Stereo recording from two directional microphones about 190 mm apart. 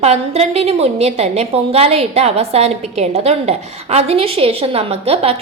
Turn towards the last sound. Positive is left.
turn(degrees=-30)  # may be behind; listen again after turning